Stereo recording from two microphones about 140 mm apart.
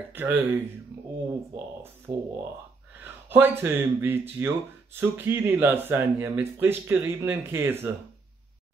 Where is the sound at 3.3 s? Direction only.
15° right (ahead or behind).